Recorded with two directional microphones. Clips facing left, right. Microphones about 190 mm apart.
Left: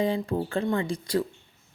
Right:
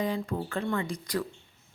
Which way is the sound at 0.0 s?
30° left (ahead or behind).